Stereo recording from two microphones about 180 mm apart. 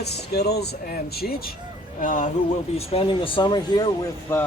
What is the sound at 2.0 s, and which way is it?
Speech, 45° left (ahead or behind).